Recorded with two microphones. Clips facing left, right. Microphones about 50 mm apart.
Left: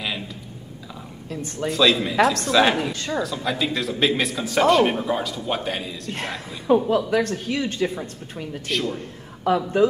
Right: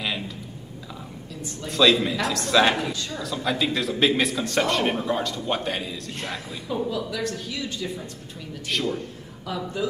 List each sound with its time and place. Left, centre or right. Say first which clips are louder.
1.3 s speech: left 9 dB; left
1.7 s a man's voice: even; centre
2.9 s speech: left 3 dB; left
3.2 s a man's voice: left 1 dB; centre
6.7 s speech: left 9 dB; left
8.6 s a man's voice: even; centre
9.5 s speech: left 11 dB; left